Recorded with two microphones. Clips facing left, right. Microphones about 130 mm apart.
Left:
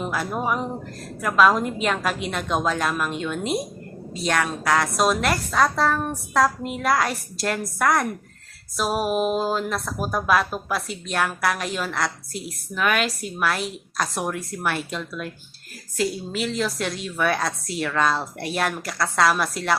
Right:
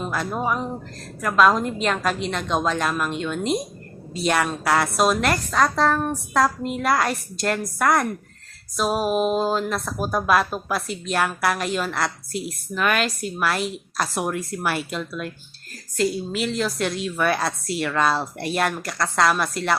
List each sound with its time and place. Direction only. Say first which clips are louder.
0.0 s a woman's voice: even; 5° left (ahead or behind)